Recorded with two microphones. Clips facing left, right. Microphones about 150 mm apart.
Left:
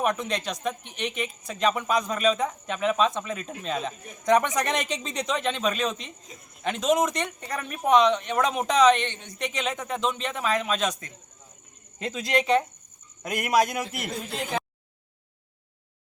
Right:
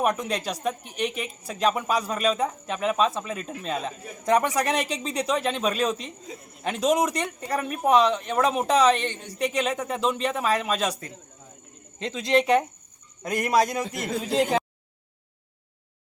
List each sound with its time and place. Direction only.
0.0 s speech: 10° right (ahead or behind)
9.2 s speech: 35° right (ahead or behind)
9.5 s speech: 10° right (ahead or behind)
11.9 s speech: 5° left (ahead or behind)
14.3 s speech: 90° right